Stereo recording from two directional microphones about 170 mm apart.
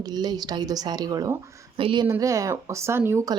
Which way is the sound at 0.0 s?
25° right (ahead or behind).